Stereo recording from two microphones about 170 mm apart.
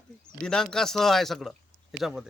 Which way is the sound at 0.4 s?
5° left (ahead or behind).